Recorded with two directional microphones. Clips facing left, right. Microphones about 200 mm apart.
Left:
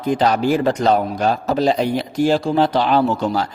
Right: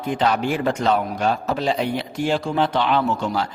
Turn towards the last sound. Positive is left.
turn(degrees=35)  # may be behind; listen again after turning